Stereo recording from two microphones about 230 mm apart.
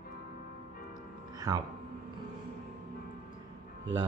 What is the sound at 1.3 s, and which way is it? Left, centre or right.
Music, centre.